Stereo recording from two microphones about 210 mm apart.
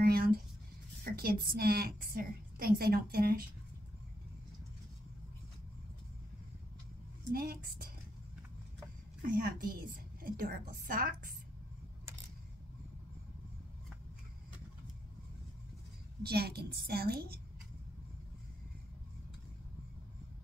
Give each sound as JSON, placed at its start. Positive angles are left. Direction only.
{"t": 0.0, "sound": "a woman's voice", "side_deg": -45}
{"t": 7.3, "sound": "a woman's voice", "side_deg": -45}
{"t": 9.3, "sound": "a woman's voice", "side_deg": -40}
{"t": 16.2, "sound": "a woman's voice", "side_deg": -50}